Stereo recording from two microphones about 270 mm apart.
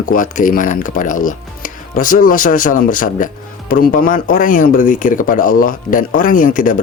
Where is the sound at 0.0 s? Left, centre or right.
Left.